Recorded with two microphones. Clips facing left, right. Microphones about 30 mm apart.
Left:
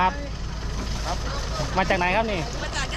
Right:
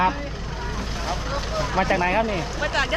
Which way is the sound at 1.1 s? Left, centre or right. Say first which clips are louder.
Right 3 dB; centre.